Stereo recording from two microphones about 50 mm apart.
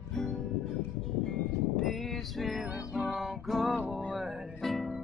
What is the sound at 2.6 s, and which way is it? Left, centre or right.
Music, centre.